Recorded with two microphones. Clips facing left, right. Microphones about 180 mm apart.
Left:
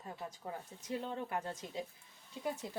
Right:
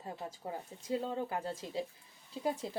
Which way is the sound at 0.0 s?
25° right (ahead or behind).